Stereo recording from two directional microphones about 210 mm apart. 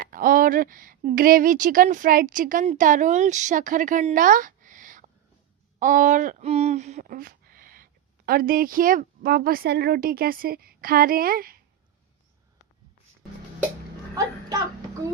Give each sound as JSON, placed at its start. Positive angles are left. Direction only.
{"t": 0.0, "sound": "a woman's voice", "side_deg": -40}